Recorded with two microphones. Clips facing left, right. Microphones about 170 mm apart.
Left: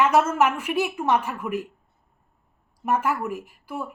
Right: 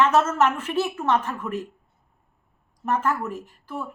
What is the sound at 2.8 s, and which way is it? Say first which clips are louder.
A woman's voice: left 1 dB; 10° left (ahead or behind).